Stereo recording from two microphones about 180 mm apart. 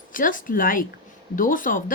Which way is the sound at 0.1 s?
50° left (ahead or behind).